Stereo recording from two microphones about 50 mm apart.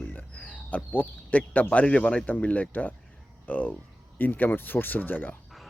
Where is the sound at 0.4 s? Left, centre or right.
Left.